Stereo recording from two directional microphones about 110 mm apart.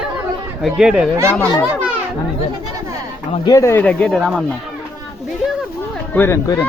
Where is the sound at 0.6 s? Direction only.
5° right (ahead or behind).